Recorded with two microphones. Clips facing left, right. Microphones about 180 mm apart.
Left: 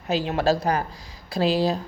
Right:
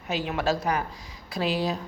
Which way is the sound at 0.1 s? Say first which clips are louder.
Left 5 dB; 30° left (ahead or behind).